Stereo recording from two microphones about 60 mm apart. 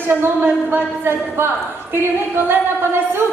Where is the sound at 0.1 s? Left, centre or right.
Right.